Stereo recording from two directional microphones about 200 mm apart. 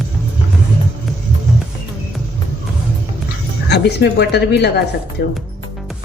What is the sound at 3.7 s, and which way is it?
Speech, 60° left (ahead or behind).